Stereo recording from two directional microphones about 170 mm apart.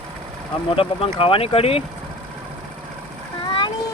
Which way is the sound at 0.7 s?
30° left (ahead or behind).